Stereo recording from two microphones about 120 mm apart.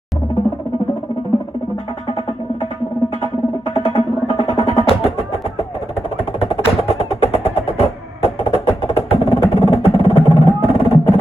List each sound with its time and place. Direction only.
3.8 s music: 55° left (ahead or behind)
6.4 s music: 55° left (ahead or behind)